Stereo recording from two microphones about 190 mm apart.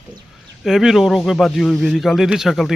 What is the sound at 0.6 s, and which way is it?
A woman's voice, centre (ahead or behind).